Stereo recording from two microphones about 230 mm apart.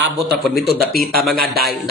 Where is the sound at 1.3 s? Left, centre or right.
Right.